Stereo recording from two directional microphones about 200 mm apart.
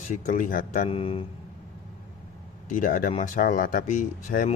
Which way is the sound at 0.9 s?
30° left (ahead or behind).